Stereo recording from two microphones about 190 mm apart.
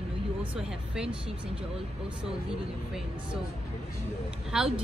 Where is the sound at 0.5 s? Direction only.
5° right (ahead or behind).